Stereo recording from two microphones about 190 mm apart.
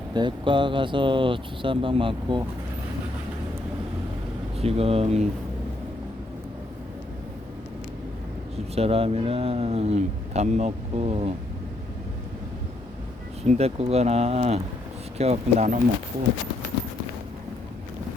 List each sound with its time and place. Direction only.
0.1 s speech: 25° right (ahead or behind)
4.6 s speech: 30° right (ahead or behind)
8.5 s speech: 35° right (ahead or behind)
13.4 s speech: 35° right (ahead or behind)